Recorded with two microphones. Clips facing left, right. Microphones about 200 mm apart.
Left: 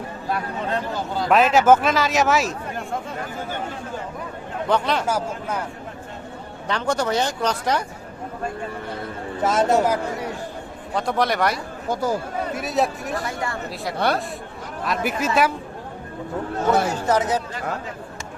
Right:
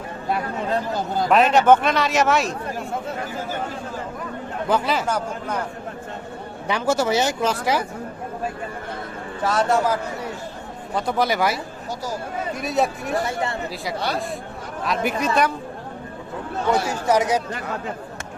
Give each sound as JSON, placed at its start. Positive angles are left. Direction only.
{"t": 0.3, "sound": "speech", "side_deg": -25}
{"t": 1.3, "sound": "a man's voice", "side_deg": 0}
{"t": 4.7, "sound": "a man's voice", "side_deg": -5}
{"t": 5.0, "sound": "speech", "side_deg": 5}
{"t": 6.7, "sound": "speech", "side_deg": -10}
{"t": 9.4, "sound": "speech", "side_deg": 20}
{"t": 10.9, "sound": "a man's voice", "side_deg": 0}
{"t": 11.9, "sound": "speech", "side_deg": 55}
{"t": 12.5, "sound": "a man's voice", "side_deg": 0}
{"t": 13.2, "sound": "speech", "side_deg": -25}
{"t": 13.9, "sound": "speech", "side_deg": 55}
{"t": 14.8, "sound": "a man's voice", "side_deg": 0}
{"t": 16.9, "sound": "speech", "side_deg": -10}